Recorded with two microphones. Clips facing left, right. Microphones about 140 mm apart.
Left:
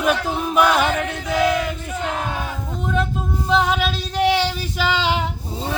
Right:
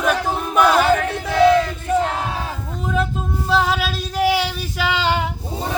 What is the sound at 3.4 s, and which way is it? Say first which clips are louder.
Female singing: even; centre (ahead or behind).